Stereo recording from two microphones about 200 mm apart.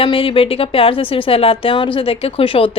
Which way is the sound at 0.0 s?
25° left (ahead or behind).